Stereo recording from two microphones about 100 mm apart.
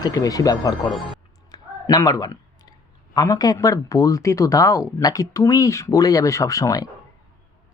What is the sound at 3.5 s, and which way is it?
Speech, 35° left (ahead or behind).